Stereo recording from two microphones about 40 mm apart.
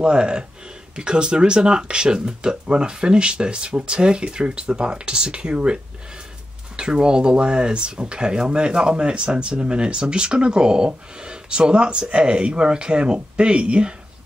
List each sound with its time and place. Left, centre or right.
0.0 s speech: right
6.8 s speech: right